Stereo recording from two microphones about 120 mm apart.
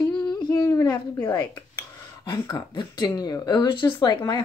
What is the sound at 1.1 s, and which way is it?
Speech, 15° left (ahead or behind).